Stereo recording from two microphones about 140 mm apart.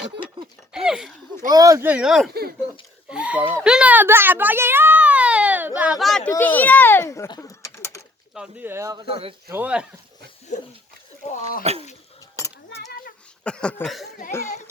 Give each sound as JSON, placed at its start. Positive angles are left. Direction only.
{"t": 0.7, "sound": "speech", "side_deg": -5}
{"t": 1.5, "sound": "speech", "side_deg": -25}
{"t": 1.9, "sound": "speech", "side_deg": -5}
{"t": 3.1, "sound": "a sound", "side_deg": -10}
{"t": 6.0, "sound": "a child's voice", "side_deg": 5}
{"t": 8.3, "sound": "speech", "side_deg": -5}
{"t": 9.0, "sound": "speech", "side_deg": -45}
{"t": 9.5, "sound": "speech", "side_deg": -10}
{"t": 10.5, "sound": "a sound", "side_deg": 60}
{"t": 11.3, "sound": "cat", "side_deg": 60}
{"t": 11.6, "sound": "bird", "side_deg": -50}
{"t": 13.4, "sound": "cough", "side_deg": 5}